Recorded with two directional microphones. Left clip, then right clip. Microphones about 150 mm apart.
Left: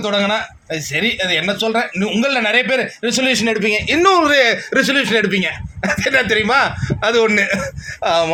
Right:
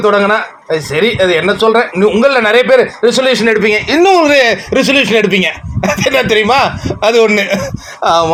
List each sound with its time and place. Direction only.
0.0 s speech: 5° left (ahead or behind)
3.6 s speech: 25° left (ahead or behind)
3.8 s speech: centre (ahead or behind)
4.2 s speech: 15° right (ahead or behind)